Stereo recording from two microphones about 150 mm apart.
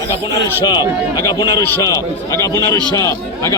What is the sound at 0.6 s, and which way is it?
Speech, 25° left (ahead or behind).